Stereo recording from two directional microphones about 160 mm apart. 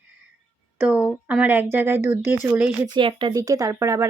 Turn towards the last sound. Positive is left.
turn(degrees=-20)  # may be behind; listen again after turning